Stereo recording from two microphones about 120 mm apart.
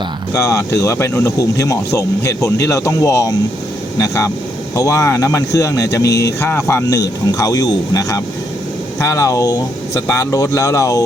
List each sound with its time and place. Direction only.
0.3 s speech: 25° left (ahead or behind)